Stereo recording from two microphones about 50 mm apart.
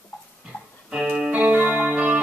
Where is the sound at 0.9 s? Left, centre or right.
Centre.